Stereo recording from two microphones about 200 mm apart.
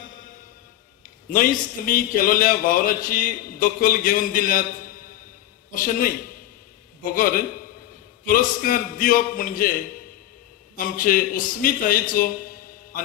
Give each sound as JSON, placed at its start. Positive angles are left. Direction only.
{"t": 1.3, "sound": "a man's voice", "side_deg": 45}
{"t": 10.8, "sound": "a man's voice", "side_deg": 45}